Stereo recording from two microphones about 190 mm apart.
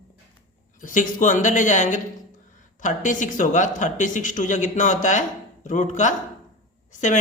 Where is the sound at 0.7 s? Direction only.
45° left (ahead or behind).